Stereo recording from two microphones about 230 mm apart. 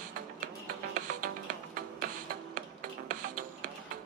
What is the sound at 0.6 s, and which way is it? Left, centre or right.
Music, right.